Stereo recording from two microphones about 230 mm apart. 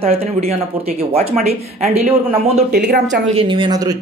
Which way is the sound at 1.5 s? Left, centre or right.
Right.